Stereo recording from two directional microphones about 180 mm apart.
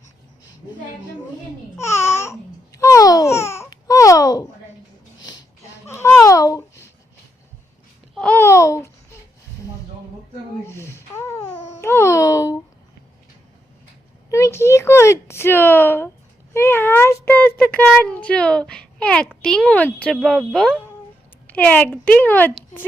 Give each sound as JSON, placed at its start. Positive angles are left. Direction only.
{"t": 1.8, "sound": "babbling", "side_deg": 15}
{"t": 5.8, "sound": "babbling", "side_deg": 15}
{"t": 8.1, "sound": "babbling", "side_deg": 5}
{"t": 10.7, "sound": "babbling", "side_deg": 15}
{"t": 14.3, "sound": "a sound", "side_deg": 15}
{"t": 20.1, "sound": "speech", "side_deg": 0}